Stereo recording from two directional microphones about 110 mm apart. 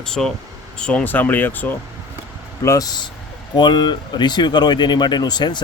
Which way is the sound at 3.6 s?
45° left (ahead or behind).